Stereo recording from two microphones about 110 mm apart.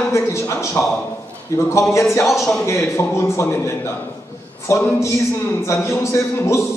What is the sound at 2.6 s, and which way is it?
A man's voice, 25° left (ahead or behind).